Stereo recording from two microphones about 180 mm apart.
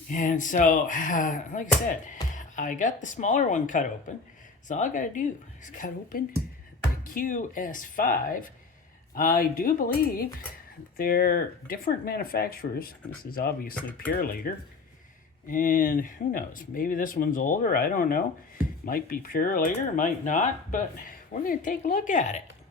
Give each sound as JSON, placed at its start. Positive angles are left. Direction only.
{"t": 0.1, "sound": "speech", "side_deg": 45}
{"t": 15.4, "sound": "speech", "side_deg": 50}